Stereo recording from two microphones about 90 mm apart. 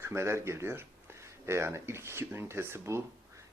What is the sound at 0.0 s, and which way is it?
Speech, 30° right (ahead or behind).